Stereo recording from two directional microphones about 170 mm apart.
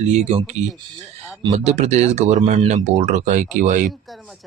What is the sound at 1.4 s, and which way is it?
A man's voice, 40° right (ahead or behind).